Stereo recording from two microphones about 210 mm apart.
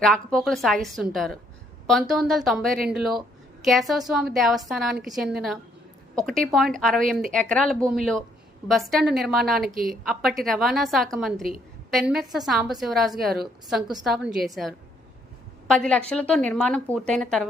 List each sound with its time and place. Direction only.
0.0 s a woman's voice: centre (ahead or behind)
9.6 s speech: 45° right (ahead or behind)
9.8 s a woman's voice: centre (ahead or behind)